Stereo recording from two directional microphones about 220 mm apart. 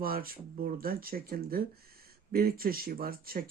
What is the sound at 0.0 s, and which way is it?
Speech, 40° right (ahead or behind).